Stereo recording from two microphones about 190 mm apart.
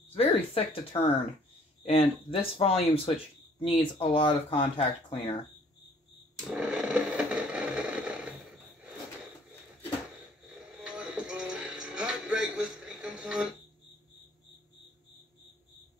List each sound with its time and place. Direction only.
0.1 s speech: 30° left (ahead or behind)
6.5 s a sound: 5° right (ahead or behind)
10.8 s music: 5° right (ahead or behind)